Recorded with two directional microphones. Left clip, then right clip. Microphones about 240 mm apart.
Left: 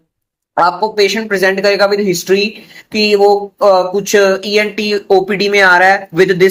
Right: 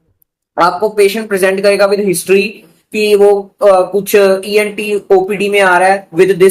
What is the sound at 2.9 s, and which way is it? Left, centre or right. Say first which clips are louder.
Speech: right 1 dB; left.